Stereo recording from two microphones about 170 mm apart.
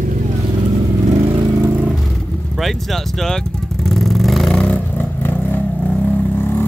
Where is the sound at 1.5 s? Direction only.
20° right (ahead or behind).